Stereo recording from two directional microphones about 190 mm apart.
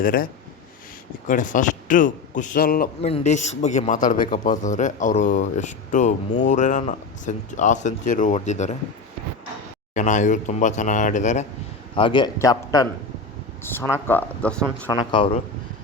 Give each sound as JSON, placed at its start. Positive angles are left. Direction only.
{"t": 0.0, "sound": "a man's voice", "side_deg": 50}
{"t": 1.3, "sound": "a man's voice", "side_deg": 45}
{"t": 3.0, "sound": "a man's voice", "side_deg": 35}
{"t": 9.9, "sound": "a man's voice", "side_deg": 40}
{"t": 11.9, "sound": "a man's voice", "side_deg": 25}
{"t": 14.8, "sound": "a man's voice", "side_deg": 25}